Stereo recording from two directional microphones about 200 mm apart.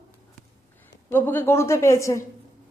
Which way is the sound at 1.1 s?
10° left (ahead or behind).